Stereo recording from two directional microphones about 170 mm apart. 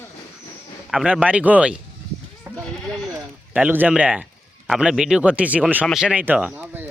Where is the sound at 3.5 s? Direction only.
10° right (ahead or behind).